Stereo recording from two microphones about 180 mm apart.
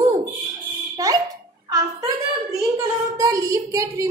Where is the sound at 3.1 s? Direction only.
20° right (ahead or behind).